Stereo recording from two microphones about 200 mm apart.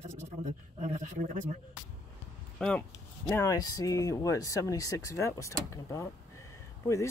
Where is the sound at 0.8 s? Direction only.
40° right (ahead or behind).